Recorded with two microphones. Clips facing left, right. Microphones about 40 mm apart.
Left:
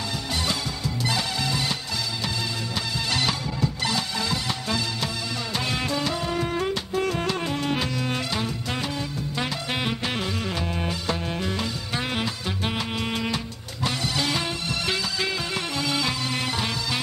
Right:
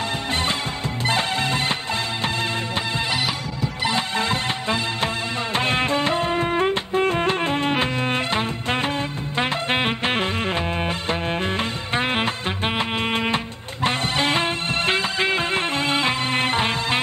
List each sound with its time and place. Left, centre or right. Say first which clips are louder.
0.3 s music: right 3 dB; right
3.9 s music: right 5 dB; right